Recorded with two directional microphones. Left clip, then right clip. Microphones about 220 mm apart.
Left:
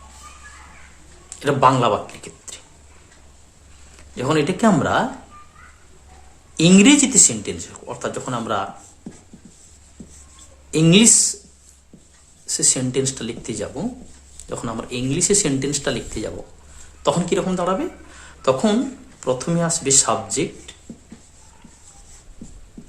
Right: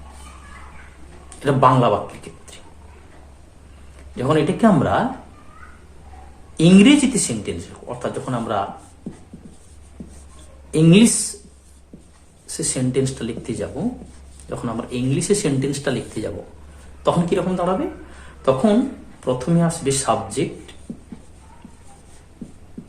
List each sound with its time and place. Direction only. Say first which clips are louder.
1.4 s speech: even; 35° left (ahead or behind)
4.1 s speech: right 1 dB; 35° left (ahead or behind)
6.6 s speech: even; 35° left (ahead or behind)
10.7 s speech: even; 35° left (ahead or behind)
12.5 s speech: left 3 dB; 35° left (ahead or behind)